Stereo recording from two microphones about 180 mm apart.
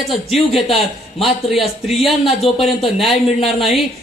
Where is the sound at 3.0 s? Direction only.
35° left (ahead or behind).